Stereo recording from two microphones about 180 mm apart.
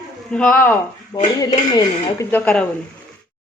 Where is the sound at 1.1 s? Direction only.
25° left (ahead or behind).